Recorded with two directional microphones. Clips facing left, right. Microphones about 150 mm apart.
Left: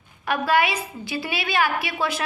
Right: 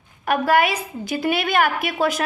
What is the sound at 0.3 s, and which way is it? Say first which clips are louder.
A woman's voice: right 3 dB; 45° right (ahead or behind).